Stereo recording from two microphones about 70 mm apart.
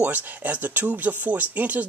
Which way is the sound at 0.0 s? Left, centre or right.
Right.